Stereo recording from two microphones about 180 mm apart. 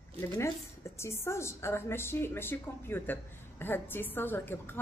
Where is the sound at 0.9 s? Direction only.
15° left (ahead or behind).